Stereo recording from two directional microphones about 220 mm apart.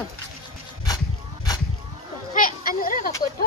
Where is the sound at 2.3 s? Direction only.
40° left (ahead or behind).